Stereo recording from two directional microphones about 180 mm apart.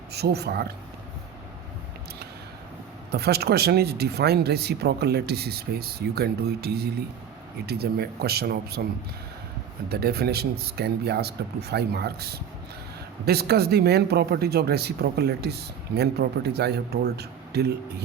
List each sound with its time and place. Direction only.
0.1 s speech: 65° right (ahead or behind)
3.1 s speech: 60° right (ahead or behind)
9.9 s speech: 60° right (ahead or behind)
13.2 s speech: 60° right (ahead or behind)